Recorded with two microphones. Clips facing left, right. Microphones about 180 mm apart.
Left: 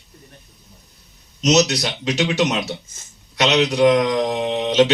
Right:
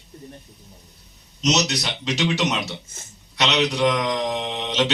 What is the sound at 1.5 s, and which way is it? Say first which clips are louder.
Mantra: left 7 dB; 45° left (ahead or behind).